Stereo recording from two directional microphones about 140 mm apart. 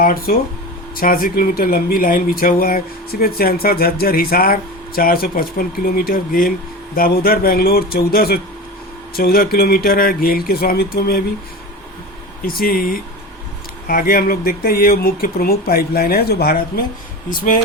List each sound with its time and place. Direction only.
0.0 s speech: 90° left
12.5 s speech: 90° left